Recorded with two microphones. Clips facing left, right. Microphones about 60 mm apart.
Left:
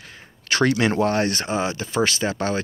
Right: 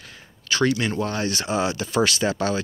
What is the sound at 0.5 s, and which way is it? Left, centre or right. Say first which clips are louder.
Speech: left 3 dB; left.